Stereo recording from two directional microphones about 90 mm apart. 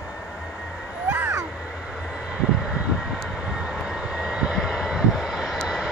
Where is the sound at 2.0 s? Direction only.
10° right (ahead or behind).